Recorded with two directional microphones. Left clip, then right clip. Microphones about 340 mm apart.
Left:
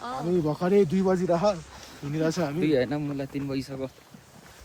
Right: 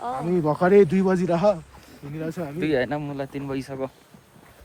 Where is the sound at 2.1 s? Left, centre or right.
Left.